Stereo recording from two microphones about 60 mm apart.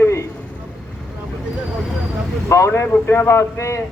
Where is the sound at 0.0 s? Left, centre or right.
Left.